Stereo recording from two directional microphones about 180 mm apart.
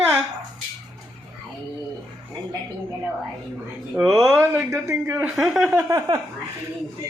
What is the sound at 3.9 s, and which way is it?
Speech, 5° right (ahead or behind).